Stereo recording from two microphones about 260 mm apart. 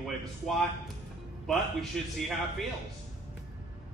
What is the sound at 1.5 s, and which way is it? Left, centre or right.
Speech, centre.